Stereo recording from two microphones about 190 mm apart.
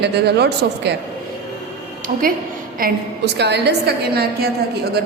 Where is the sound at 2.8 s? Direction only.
50° right (ahead or behind).